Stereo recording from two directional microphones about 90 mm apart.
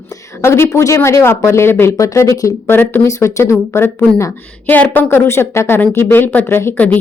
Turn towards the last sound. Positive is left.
turn(degrees=25)  # may be behind; listen again after turning